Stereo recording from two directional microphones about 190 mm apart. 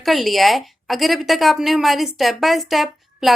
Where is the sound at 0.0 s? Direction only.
Centre (ahead or behind).